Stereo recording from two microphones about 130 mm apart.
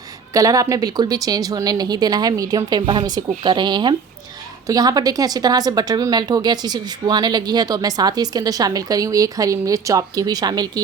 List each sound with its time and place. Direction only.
0.3 s speech: 25° right (ahead or behind)